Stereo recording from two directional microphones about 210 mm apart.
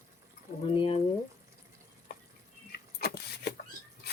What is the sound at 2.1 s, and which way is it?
Water tap, 50° left (ahead or behind).